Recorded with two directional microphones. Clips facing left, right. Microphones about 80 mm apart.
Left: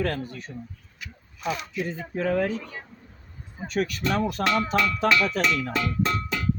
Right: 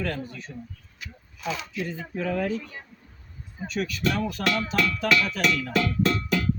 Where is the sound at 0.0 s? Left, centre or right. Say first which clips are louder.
Left 3 dB; left.